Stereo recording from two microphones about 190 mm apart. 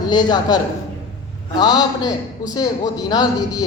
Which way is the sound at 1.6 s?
20° left (ahead or behind).